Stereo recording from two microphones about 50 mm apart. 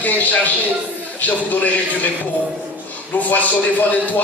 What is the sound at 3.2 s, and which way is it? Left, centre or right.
Music, left.